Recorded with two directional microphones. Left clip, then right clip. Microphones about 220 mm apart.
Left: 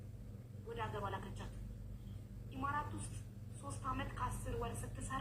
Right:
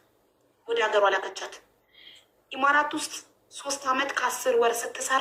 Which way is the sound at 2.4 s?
40° right (ahead or behind).